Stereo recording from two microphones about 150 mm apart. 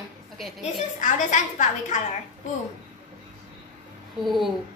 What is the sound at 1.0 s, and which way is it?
Speech, 55° left (ahead or behind).